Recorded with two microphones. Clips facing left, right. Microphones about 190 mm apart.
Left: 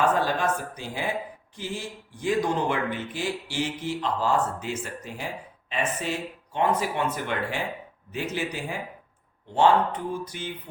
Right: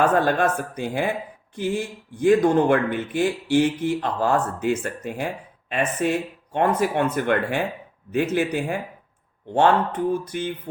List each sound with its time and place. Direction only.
0.2 s speech: 55° right (ahead or behind)